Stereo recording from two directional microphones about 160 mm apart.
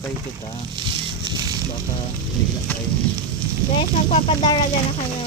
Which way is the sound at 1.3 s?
25° right (ahead or behind).